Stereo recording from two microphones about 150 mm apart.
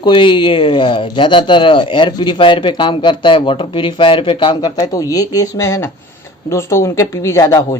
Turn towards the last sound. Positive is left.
turn(degrees=20)  # may be behind; listen again after turning